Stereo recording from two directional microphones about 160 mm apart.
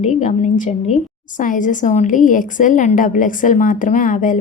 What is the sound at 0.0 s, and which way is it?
A woman's voice, 50° left (ahead or behind).